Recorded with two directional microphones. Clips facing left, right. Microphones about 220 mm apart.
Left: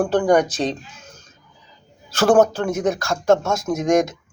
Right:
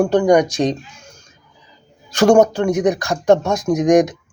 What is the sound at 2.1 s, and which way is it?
Speech, 15° right (ahead or behind).